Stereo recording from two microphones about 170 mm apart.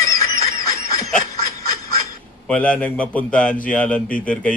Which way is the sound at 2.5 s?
5° left (ahead or behind).